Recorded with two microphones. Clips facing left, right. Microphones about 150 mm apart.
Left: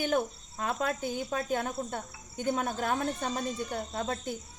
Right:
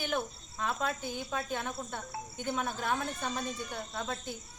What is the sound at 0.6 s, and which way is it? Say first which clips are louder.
Speech: left 3 dB; 45° left (ahead or behind).